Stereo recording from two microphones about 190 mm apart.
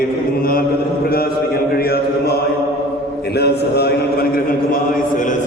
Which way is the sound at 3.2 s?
60° left (ahead or behind).